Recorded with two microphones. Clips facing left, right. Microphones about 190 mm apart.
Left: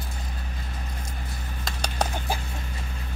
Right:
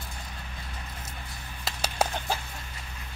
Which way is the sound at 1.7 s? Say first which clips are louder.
Even; 5° right (ahead or behind).